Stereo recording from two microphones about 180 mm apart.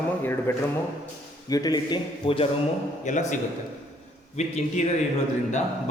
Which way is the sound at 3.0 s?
40° left (ahead or behind).